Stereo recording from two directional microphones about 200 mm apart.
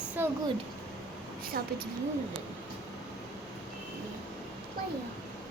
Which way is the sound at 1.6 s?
50° right (ahead or behind).